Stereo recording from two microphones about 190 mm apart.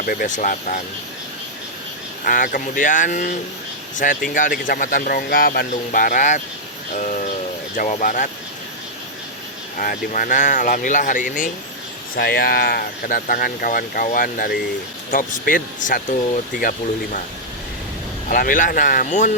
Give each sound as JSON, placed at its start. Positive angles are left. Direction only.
{"t": 0.0, "sound": "speech", "side_deg": 50}
{"t": 2.2, "sound": "speech", "side_deg": 45}
{"t": 7.8, "sound": "speech", "side_deg": 45}
{"t": 9.7, "sound": "speech", "side_deg": 45}
{"t": 18.3, "sound": "speech", "side_deg": 45}